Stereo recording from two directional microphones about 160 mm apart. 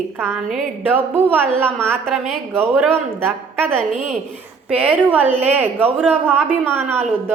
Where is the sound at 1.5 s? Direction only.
5° left (ahead or behind).